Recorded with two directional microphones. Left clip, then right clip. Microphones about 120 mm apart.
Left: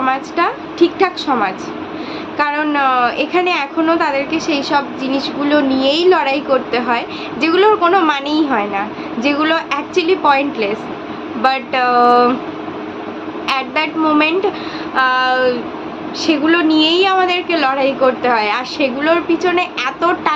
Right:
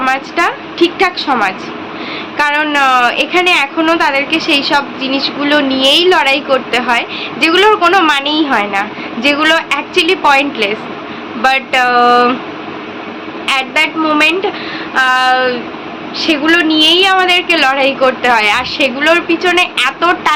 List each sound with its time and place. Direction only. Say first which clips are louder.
0.0 s a woman's voice: right 3 dB; centre (ahead or behind)
13.5 s a woman's voice: right 5 dB; 10° left (ahead or behind)